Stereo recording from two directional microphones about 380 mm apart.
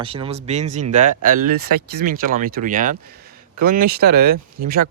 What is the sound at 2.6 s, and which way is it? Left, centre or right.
Speech, right.